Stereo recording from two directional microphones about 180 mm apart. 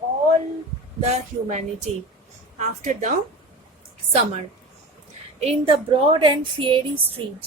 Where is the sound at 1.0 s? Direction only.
40° right (ahead or behind).